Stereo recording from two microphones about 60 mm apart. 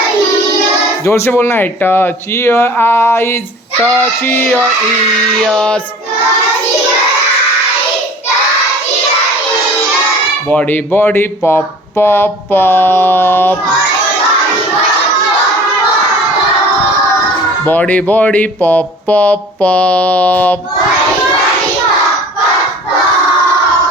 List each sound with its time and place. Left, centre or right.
1.0 s speech: left
3.9 s speech: left
5.5 s child singing: centre
10.5 s speech: left
10.9 s speech: left
17.7 s speech: left